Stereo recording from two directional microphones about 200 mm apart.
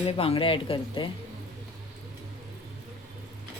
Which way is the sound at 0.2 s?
25° left (ahead or behind).